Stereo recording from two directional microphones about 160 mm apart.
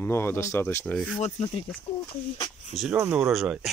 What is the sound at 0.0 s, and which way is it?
Speech, 15° left (ahead or behind).